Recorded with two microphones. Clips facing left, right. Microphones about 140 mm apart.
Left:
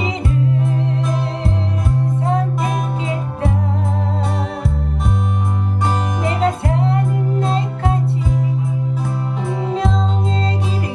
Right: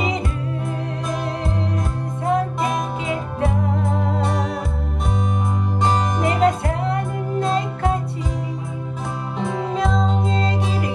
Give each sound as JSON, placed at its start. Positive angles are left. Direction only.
{"t": 6.4, "sound": "music", "side_deg": 25}